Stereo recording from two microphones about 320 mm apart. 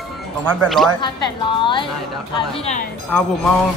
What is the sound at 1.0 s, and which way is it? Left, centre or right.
A woman's voice, centre.